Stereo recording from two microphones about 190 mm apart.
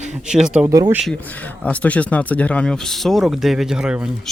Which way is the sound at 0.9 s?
5° left (ahead or behind).